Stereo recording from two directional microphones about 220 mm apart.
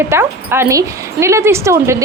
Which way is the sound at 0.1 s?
10° right (ahead or behind).